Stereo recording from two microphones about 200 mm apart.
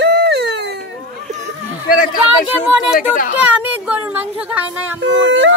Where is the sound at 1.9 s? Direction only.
45° left (ahead or behind).